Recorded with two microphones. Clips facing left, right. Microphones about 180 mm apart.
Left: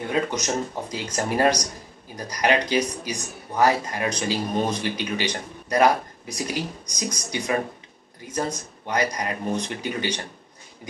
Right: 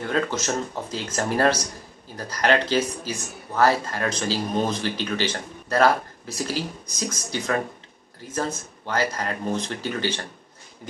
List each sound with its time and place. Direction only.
0.1 s speech: 15° left (ahead or behind)